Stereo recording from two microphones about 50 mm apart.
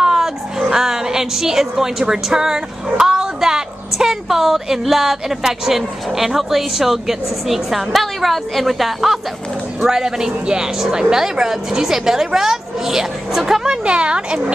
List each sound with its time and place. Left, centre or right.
0.0 s a woman's voice: centre
13.7 s speech: centre